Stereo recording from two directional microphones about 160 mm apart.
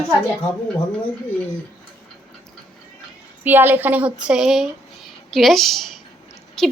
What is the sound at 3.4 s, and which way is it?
A woman's voice, 10° right (ahead or behind).